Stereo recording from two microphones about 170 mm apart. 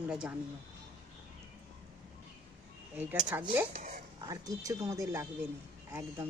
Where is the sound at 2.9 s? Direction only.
10° right (ahead or behind).